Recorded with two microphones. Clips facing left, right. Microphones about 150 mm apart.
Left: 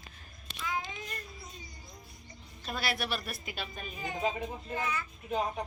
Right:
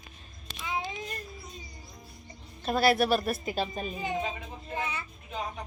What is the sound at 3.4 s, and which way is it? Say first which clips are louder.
A child's voice: right 9 dB; 30° right (ahead or behind).